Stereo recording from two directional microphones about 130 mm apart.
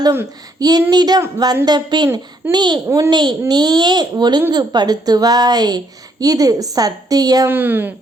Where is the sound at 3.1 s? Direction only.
35° right (ahead or behind).